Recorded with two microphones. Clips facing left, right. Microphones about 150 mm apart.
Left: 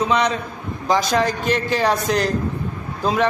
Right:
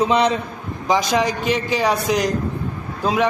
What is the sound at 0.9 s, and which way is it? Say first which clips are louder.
A man's voice: even; 15° right (ahead or behind).